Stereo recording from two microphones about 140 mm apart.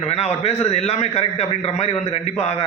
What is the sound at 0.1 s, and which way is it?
A man's voice, 50° left (ahead or behind).